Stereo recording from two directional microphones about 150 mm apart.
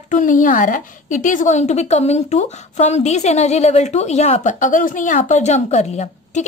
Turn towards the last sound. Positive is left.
turn(degrees=50)  # may be behind; listen again after turning